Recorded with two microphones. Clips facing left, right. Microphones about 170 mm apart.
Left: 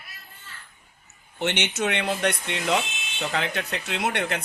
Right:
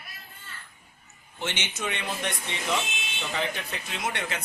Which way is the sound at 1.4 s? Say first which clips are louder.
Left 7 dB; 65° left (ahead or behind).